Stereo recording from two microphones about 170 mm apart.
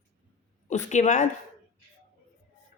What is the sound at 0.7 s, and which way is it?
Speech, 45° left (ahead or behind).